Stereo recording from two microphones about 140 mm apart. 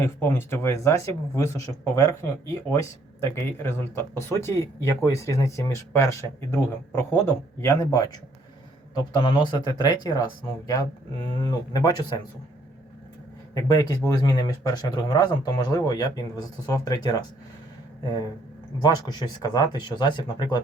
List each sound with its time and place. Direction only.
0.0 s speech: 15° left (ahead or behind)
3.3 s speech: 15° left (ahead or behind)
9.1 s speech: 35° left (ahead or behind)
13.5 s speech: 25° left (ahead or behind)